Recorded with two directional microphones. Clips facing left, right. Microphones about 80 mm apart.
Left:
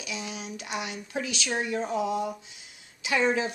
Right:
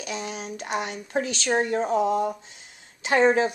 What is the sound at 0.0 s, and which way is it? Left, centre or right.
A woman's voice, right.